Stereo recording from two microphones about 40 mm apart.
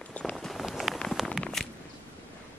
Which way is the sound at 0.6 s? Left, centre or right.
Centre.